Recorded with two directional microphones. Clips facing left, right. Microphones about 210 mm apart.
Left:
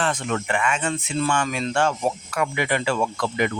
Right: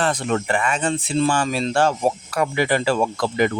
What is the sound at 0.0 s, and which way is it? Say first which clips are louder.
Speech: right 3 dB; 35° right (ahead or behind).